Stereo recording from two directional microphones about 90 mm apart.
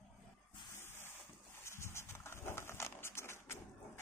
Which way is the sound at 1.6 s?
30° left (ahead or behind).